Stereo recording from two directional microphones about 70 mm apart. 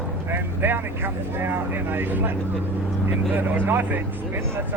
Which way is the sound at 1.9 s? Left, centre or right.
Right.